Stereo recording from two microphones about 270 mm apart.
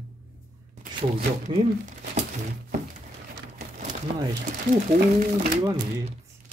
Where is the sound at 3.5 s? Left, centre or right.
Right.